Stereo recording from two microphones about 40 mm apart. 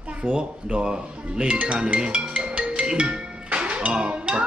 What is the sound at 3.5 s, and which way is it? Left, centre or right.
Music, right.